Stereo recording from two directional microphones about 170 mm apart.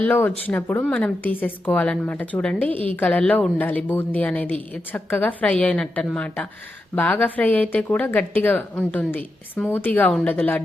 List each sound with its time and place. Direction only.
0.0 s a woman's voice: 10° left (ahead or behind)